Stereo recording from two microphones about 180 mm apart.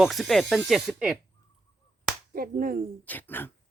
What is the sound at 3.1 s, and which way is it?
Speech, 10° left (ahead or behind).